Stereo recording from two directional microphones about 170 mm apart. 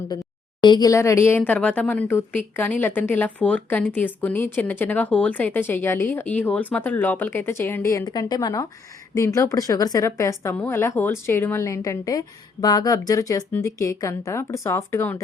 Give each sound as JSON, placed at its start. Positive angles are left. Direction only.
{"t": 0.6, "sound": "a woman's voice", "side_deg": 25}